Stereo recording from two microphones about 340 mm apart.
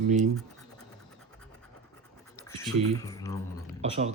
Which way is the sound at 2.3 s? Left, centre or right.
Centre.